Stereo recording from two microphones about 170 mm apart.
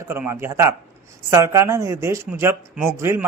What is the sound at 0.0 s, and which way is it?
Speech, 15° right (ahead or behind).